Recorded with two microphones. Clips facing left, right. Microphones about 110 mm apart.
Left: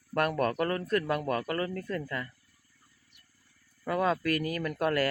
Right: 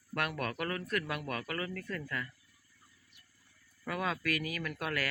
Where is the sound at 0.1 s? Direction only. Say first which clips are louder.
Left 8 dB; 40° left (ahead or behind).